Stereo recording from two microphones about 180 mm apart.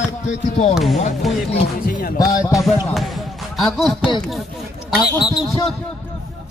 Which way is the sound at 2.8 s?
Centre (ahead or behind).